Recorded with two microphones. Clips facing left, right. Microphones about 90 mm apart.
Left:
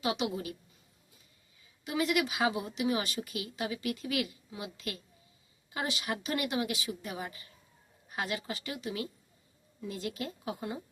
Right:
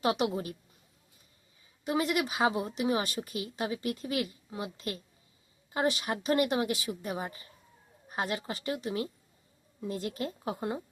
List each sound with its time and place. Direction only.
0.0 s a woman's voice: 45° right (ahead or behind)
1.8 s speech: 40° right (ahead or behind)